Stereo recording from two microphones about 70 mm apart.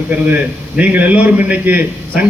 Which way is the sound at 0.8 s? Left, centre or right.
Right.